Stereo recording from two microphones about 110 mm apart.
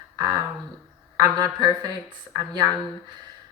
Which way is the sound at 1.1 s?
35° right (ahead or behind).